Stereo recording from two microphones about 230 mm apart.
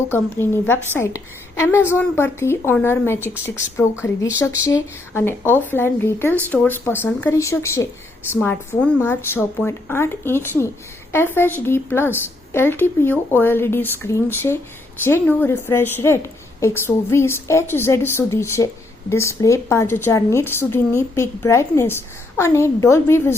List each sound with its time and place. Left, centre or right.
0.1 s a woman's voice: centre